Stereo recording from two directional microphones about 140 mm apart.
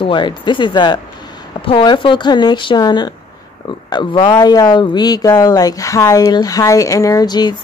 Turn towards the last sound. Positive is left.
turn(degrees=30)  # may be behind; listen again after turning